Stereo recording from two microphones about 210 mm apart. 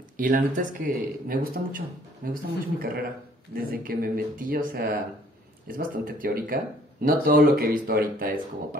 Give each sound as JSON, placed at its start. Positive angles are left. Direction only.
{"t": 0.2, "sound": "speech", "side_deg": -40}